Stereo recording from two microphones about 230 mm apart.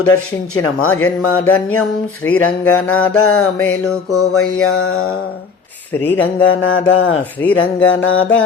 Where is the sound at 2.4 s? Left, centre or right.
Left.